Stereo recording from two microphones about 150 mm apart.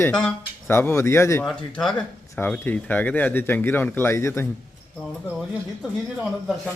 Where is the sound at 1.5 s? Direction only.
Centre (ahead or behind).